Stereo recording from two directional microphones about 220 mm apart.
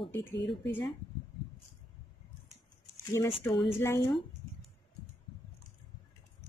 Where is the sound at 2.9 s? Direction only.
15° left (ahead or behind).